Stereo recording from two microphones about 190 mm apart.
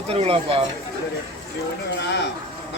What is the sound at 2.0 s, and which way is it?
Speech, 65° left (ahead or behind).